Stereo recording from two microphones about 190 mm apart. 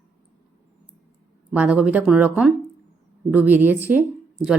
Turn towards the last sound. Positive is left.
turn(degrees=-5)  # may be behind; listen again after turning